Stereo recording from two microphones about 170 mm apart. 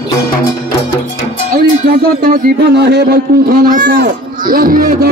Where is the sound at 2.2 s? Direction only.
60° right (ahead or behind).